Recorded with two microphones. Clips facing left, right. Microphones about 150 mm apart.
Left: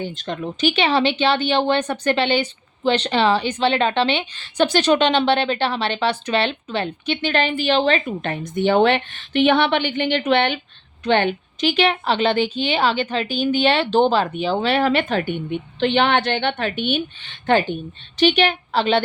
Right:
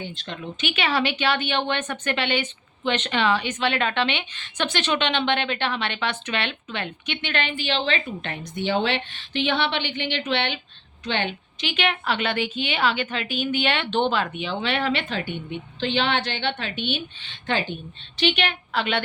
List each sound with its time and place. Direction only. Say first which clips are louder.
0.0 s a woman's voice: left 7 dB; 45° left (ahead or behind)
0.7 s a woman's voice: left 5 dB; 30° left (ahead or behind); by 11.7 s 50° left (ahead or behind)
11.7 s a woman's voice: left 5 dB; 35° left (ahead or behind); by 17.7 s 50° left (ahead or behind)
18.2 s a woman's voice: left 7 dB; 40° left (ahead or behind)